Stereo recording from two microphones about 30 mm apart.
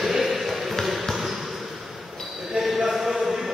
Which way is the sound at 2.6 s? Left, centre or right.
Centre.